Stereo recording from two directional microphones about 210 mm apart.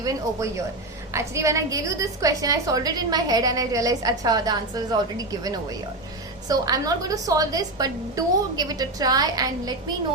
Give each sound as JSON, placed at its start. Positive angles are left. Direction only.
{"t": 0.0, "sound": "a woman's voice", "side_deg": -15}